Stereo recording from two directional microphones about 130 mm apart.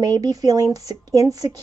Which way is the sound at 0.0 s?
30° right (ahead or behind).